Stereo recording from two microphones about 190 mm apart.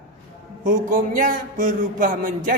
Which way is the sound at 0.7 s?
45° right (ahead or behind).